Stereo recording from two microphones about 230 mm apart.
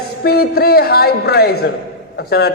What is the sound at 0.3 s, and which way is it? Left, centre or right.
A man's voice, left.